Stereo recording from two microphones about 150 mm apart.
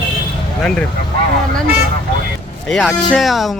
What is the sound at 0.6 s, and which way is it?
Speech, 5° left (ahead or behind).